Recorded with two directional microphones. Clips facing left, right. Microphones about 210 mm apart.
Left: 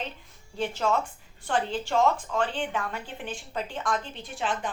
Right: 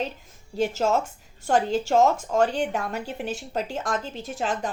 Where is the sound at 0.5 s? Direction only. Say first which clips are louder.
Right 4 dB; 45° right (ahead or behind).